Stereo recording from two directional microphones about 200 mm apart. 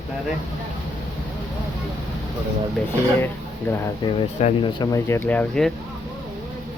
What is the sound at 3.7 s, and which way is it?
Speech, 10° left (ahead or behind).